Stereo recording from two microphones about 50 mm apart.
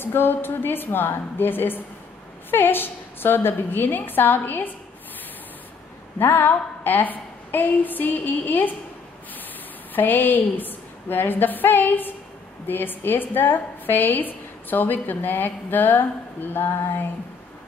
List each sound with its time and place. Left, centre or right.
0.0 s a woman's voice: left
6.1 s a woman's voice: left
9.9 s a woman's voice: left